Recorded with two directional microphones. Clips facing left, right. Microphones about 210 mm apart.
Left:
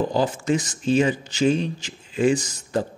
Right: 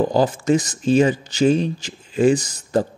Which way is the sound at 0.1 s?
40° right (ahead or behind).